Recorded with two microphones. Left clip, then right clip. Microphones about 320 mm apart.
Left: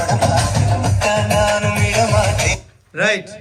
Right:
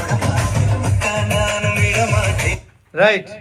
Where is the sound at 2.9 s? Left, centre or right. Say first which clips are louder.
Right 3 dB; centre.